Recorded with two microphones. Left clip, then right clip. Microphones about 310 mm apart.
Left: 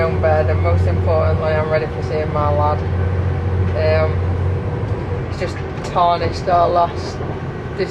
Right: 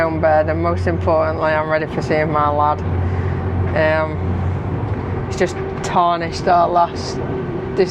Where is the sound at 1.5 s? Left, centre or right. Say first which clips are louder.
Even; right.